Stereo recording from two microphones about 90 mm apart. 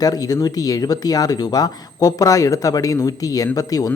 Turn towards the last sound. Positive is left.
turn(degrees=40)  # may be behind; listen again after turning